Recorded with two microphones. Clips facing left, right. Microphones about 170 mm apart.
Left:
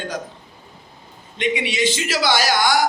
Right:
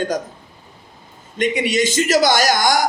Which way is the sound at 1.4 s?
45° right (ahead or behind).